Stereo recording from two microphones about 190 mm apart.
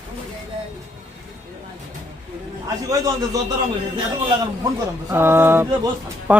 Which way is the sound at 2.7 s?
20° right (ahead or behind).